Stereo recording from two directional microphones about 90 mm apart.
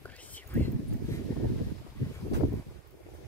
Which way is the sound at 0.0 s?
15° left (ahead or behind).